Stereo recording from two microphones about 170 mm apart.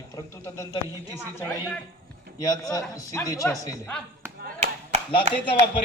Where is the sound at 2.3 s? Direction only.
20° left (ahead or behind).